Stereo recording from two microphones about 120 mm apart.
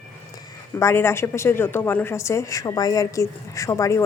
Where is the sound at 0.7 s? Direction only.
20° left (ahead or behind).